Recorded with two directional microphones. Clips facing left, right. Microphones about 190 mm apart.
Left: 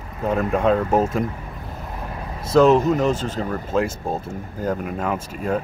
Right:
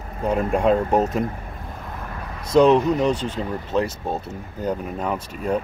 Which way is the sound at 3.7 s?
5° left (ahead or behind).